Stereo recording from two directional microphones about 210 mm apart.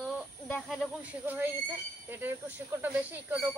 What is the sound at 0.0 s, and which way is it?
Speech, centre (ahead or behind).